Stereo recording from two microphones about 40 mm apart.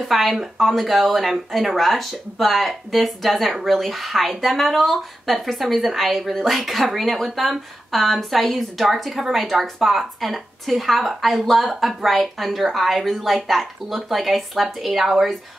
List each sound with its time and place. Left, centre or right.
0.1 s speech: centre